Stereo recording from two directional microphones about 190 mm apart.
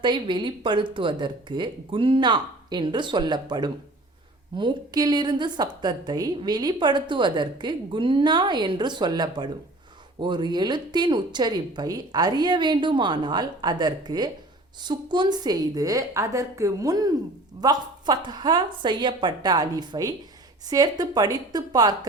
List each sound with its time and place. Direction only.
0.0 s a woman's voice: 25° right (ahead or behind)